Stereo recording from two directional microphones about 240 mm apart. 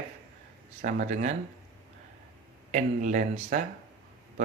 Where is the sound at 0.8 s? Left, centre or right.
Right.